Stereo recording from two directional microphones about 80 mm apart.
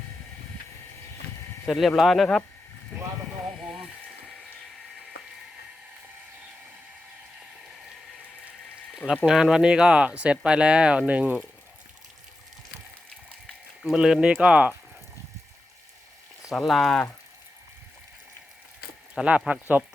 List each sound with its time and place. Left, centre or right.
1.6 s speech: centre
9.2 s speech: centre
13.8 s speech: centre
16.6 s speech: centre
19.1 s speech: centre